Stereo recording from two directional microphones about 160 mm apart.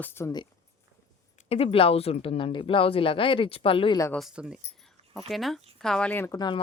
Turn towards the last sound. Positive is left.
turn(degrees=25)  # may be behind; listen again after turning